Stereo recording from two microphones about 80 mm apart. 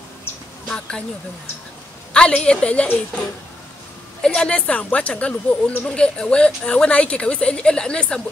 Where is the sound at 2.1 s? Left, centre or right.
Centre.